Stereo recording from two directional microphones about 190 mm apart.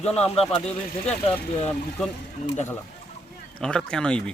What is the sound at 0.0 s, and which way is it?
Speech, 35° left (ahead or behind).